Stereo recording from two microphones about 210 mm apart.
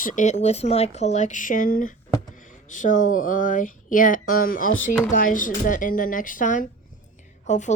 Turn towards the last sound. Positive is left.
turn(degrees=35)  # may be behind; listen again after turning